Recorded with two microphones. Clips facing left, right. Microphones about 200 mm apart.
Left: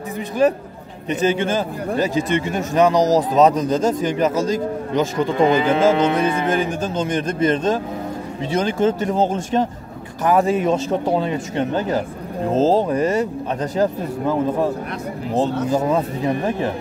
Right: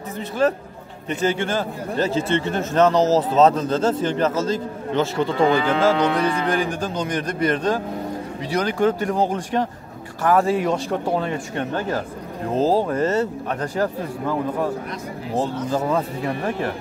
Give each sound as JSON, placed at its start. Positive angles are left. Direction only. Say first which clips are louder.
{"t": 0.4, "sound": "a man's voice", "louder": "left 3 dB", "side_deg": 15}
{"t": 15.7, "sound": "speech", "louder": "left 3 dB", "side_deg": 15}